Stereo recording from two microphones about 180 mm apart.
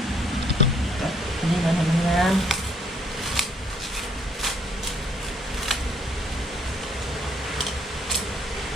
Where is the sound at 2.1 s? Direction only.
Centre (ahead or behind).